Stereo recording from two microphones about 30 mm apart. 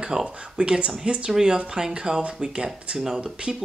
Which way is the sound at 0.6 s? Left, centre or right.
Right.